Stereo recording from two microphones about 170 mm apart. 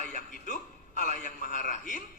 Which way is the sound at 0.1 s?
50° left (ahead or behind).